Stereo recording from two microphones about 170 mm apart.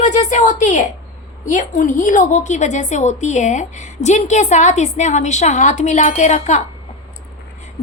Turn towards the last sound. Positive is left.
turn(degrees=45)  # may be behind; listen again after turning